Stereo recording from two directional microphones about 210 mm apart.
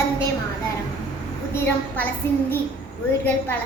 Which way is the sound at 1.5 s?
10° left (ahead or behind).